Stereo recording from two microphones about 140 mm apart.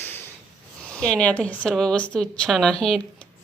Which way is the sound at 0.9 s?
5° left (ahead or behind).